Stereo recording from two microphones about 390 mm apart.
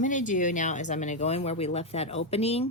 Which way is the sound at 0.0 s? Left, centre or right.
Centre.